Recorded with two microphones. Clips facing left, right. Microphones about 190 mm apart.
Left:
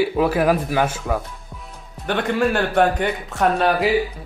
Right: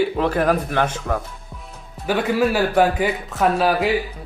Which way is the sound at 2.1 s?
5° right (ahead or behind).